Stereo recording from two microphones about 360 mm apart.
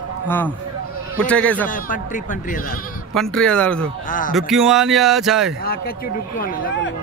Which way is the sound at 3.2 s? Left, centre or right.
Centre.